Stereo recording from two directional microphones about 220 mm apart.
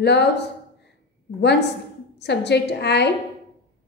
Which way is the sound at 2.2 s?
50° left (ahead or behind).